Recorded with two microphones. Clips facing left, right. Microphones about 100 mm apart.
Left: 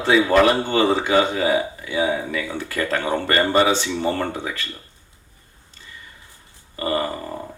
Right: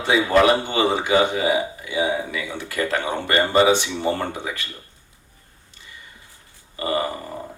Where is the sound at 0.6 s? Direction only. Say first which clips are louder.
Left 2 dB; 15° right (ahead or behind).